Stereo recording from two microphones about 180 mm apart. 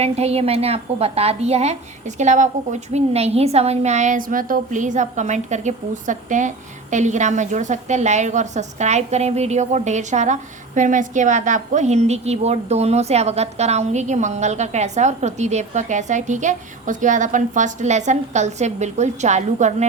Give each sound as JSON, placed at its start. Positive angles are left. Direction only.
{"t": 0.0, "sound": "a woman's voice", "side_deg": -35}